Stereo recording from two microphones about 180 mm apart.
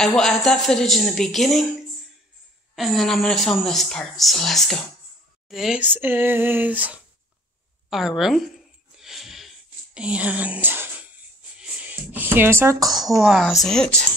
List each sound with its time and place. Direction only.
0.0 s speech: centre (ahead or behind)
2.7 s speech: centre (ahead or behind)
8.9 s a sound: centre (ahead or behind)
9.9 s speech: 5° right (ahead or behind)
11.9 s speech: 10° right (ahead or behind)
13.2 s speech: centre (ahead or behind)